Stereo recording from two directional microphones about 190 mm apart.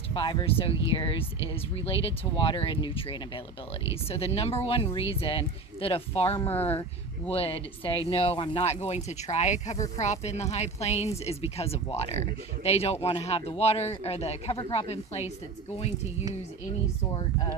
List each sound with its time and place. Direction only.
0.1 s speech: 25° left (ahead or behind)